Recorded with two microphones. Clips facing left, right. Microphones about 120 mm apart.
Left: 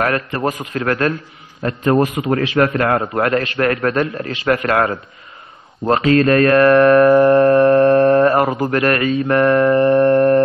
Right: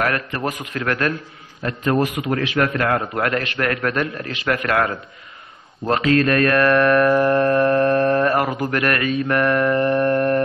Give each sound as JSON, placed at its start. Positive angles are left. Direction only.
{"t": 0.0, "sound": "a man's voice", "side_deg": 35}